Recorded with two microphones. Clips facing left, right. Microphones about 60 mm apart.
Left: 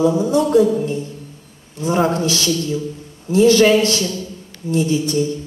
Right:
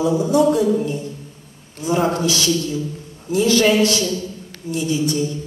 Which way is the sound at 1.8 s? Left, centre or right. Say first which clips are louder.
Left 2 dB; left.